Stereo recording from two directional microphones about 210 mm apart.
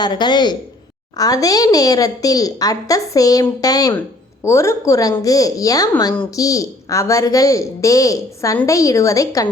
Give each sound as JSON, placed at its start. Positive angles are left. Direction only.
{"t": 0.0, "sound": "a woman's voice", "side_deg": 20}